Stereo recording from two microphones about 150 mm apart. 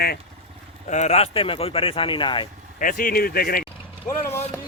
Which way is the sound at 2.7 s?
65° left (ahead or behind).